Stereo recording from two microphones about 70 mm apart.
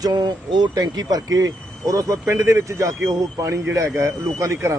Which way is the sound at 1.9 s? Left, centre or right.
Right.